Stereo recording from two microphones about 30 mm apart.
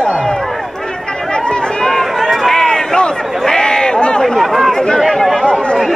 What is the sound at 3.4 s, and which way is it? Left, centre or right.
Chatter, left.